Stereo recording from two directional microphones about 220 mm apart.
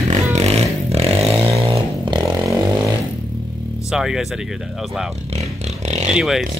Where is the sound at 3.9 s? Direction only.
Centre (ahead or behind).